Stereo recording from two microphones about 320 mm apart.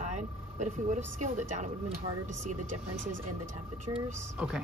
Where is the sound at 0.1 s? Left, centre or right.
Right.